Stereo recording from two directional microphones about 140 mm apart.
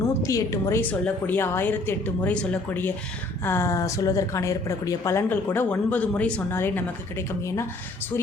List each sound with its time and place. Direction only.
0.1 s a woman's voice: 25° left (ahead or behind)